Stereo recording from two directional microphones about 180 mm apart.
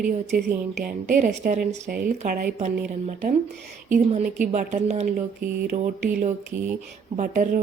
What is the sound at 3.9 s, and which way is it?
A woman's voice, 45° right (ahead or behind).